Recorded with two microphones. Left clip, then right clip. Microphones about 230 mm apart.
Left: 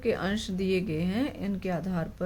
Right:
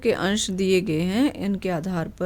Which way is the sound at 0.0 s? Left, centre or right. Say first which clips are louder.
Right 7 dB; right.